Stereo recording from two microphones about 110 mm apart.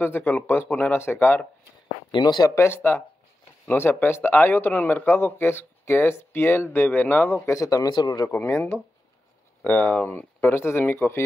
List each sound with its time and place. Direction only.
0.0 s speech: 20° left (ahead or behind)
2.0 s speech: 45° left (ahead or behind)
2.5 s speech: 25° left (ahead or behind)
8.3 s speech: 25° left (ahead or behind)
9.6 s speech: 15° left (ahead or behind)